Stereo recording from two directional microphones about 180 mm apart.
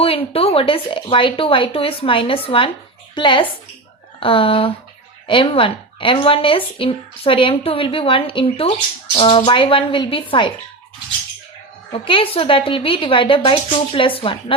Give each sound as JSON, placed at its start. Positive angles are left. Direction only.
{"t": 0.0, "sound": "a woman's voice", "side_deg": 30}
{"t": 11.9, "sound": "a woman's voice", "side_deg": 30}